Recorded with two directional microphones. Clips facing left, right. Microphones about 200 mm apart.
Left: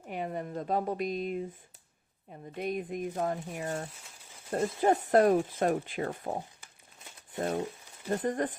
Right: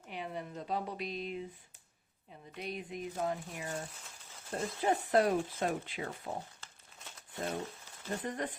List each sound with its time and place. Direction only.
0.1 s speech: 50° left (ahead or behind)
7.3 s speech: 45° left (ahead or behind)